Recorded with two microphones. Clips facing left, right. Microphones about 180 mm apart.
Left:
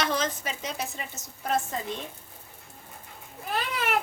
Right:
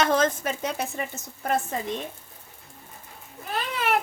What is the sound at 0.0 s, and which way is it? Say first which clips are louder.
Speech: right 6 dB; 50° right (ahead or behind).